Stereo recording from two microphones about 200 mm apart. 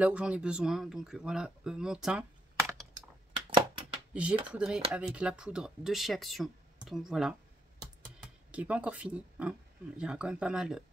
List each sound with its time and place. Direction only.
0.0 s speech: 5° right (ahead or behind)
4.1 s speech: 5° right (ahead or behind)